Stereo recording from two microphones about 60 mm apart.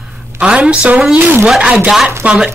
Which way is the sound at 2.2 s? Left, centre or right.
Right.